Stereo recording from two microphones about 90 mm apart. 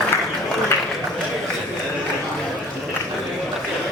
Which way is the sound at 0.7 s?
20° left (ahead or behind).